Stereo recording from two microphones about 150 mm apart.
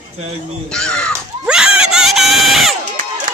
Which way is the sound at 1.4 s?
5° right (ahead or behind).